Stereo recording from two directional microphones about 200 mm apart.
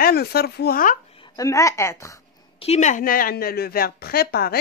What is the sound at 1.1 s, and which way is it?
A woman's voice, 25° left (ahead or behind).